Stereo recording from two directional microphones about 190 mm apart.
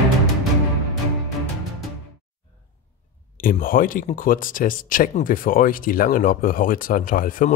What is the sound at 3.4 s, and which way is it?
Speech, 45° left (ahead or behind).